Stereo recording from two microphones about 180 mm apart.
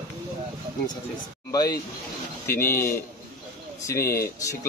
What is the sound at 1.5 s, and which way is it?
Speech, 20° left (ahead or behind).